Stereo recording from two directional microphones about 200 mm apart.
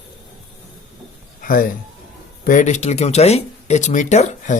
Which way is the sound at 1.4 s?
45° left (ahead or behind).